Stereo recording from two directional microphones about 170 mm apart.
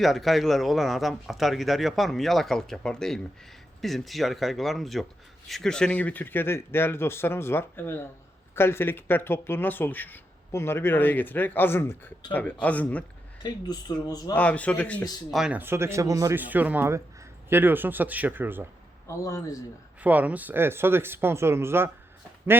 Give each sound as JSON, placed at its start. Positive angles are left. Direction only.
{"t": 0.0, "sound": "speech", "side_deg": 0}
{"t": 13.4, "sound": "speech", "side_deg": 25}
{"t": 14.3, "sound": "speech", "side_deg": 10}
{"t": 15.3, "sound": "speech", "side_deg": -5}
{"t": 19.0, "sound": "speech", "side_deg": 15}
{"t": 20.0, "sound": "speech", "side_deg": -10}